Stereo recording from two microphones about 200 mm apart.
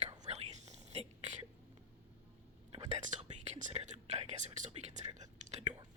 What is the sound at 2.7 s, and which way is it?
Whispering, 35° right (ahead or behind).